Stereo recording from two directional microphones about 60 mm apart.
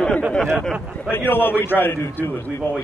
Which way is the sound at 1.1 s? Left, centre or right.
Left.